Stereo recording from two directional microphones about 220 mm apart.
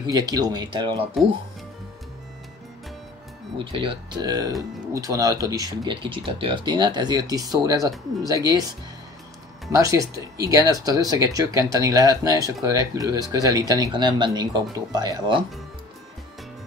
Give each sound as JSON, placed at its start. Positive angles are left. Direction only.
{"t": 0.0, "sound": "speech", "side_deg": -15}
{"t": 3.5, "sound": "speech", "side_deg": -25}